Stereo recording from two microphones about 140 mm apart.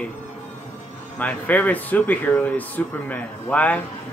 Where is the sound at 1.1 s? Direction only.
10° left (ahead or behind).